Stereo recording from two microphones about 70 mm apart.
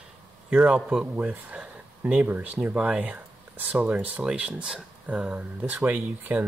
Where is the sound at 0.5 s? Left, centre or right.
Centre.